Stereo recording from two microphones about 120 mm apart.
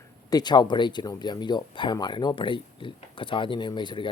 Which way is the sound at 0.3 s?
35° left (ahead or behind).